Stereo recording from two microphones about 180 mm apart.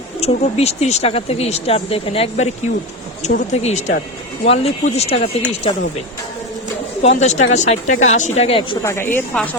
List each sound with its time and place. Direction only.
0.2 s speech: 35° left (ahead or behind)
7.0 s speech: 40° left (ahead or behind)
8.8 s a woman's voice: 15° left (ahead or behind)